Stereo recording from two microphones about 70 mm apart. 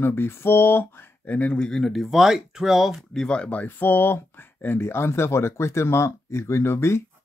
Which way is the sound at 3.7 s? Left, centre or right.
Left.